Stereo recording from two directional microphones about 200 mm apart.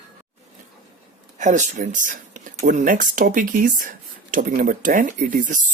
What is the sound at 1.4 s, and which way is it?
Speech, 35° right (ahead or behind).